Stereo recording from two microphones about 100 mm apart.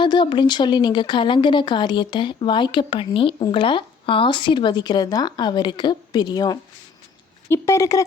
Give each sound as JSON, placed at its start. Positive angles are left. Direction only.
{"t": 0.0, "sound": "speech", "side_deg": 50}
{"t": 7.4, "sound": "speech", "side_deg": 25}